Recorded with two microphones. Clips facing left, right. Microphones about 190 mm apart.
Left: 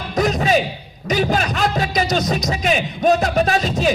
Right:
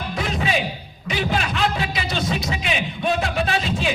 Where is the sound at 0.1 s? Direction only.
40° left (ahead or behind).